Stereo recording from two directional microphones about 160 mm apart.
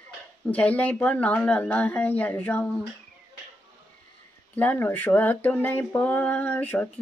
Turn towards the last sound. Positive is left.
turn(degrees=10)  # may be behind; listen again after turning